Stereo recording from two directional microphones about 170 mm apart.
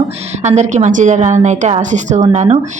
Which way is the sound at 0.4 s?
45° right (ahead or behind).